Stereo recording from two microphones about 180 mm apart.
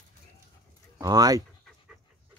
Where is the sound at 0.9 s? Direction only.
20° right (ahead or behind).